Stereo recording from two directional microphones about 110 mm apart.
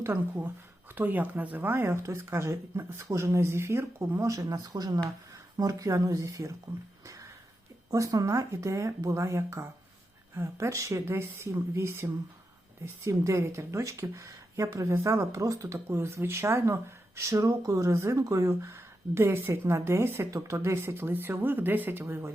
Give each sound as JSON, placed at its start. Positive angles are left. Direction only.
{"t": 0.0, "sound": "speech", "side_deg": -20}
{"t": 7.9, "sound": "speech", "side_deg": -30}